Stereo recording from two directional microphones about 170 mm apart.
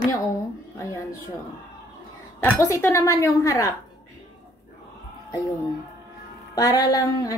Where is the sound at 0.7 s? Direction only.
15° left (ahead or behind).